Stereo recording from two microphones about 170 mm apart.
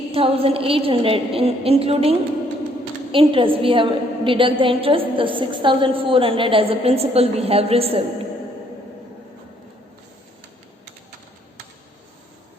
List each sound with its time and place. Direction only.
0.1 s a woman's voice: 35° right (ahead or behind)